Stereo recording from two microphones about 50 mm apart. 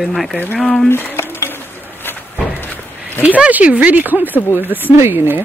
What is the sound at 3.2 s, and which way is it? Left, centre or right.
Speech, right.